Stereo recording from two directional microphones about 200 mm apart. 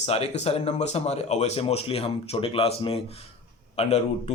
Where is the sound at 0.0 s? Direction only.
30° left (ahead or behind).